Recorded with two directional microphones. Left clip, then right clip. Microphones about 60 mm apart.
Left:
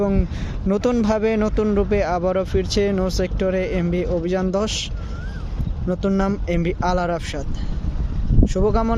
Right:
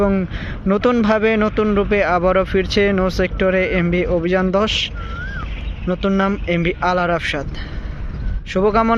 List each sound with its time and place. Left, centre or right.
0.0 s speech: left
0.7 s speech: left
5.9 s speech: left
8.4 s speech: left